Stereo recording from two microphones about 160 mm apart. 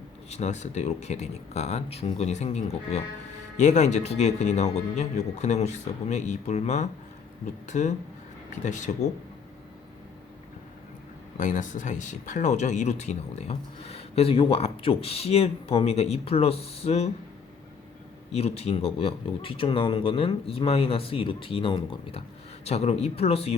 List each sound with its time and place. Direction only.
0.3 s a man's voice: 45° left (ahead or behind)
11.3 s speech: 55° left (ahead or behind)
18.3 s speech: 40° left (ahead or behind)
22.6 s speech: 40° left (ahead or behind)